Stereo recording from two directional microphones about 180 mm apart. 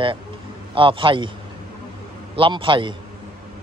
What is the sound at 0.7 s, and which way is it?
Speech, 30° right (ahead or behind).